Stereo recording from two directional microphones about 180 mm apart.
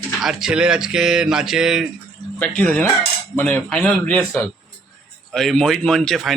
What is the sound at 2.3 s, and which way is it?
Speech, 10° left (ahead or behind).